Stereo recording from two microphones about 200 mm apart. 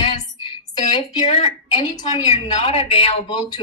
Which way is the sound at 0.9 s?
30° left (ahead or behind).